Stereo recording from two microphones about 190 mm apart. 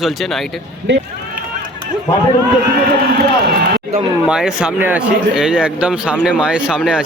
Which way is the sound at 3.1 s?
55° right (ahead or behind).